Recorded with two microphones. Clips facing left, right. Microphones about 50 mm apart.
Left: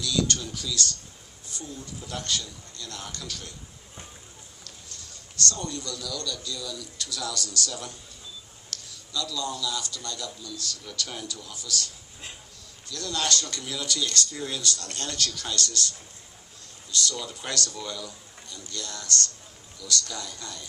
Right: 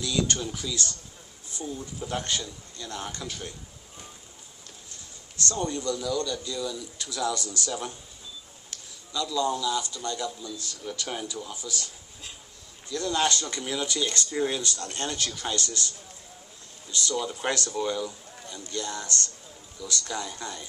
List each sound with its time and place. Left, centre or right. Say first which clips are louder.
0.0 s speech: even; right
4.6 s a man's voice: left 1 dB; right
12.9 s speech: right 3 dB; right
16.9 s speech: right 2 dB; right